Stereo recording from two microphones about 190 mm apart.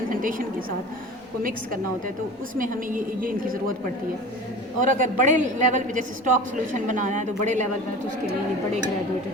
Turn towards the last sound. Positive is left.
turn(degrees=-40)  # may be behind; listen again after turning